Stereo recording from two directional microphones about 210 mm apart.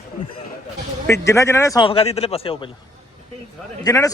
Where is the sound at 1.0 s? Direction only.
15° left (ahead or behind).